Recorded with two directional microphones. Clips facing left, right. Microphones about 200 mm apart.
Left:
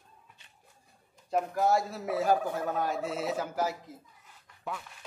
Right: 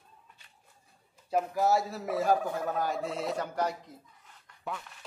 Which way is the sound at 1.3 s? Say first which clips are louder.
Even; centre (ahead or behind).